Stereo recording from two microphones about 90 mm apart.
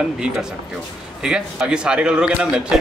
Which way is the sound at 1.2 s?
10° right (ahead or behind).